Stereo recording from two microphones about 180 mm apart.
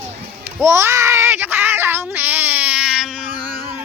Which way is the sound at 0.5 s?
15° right (ahead or behind).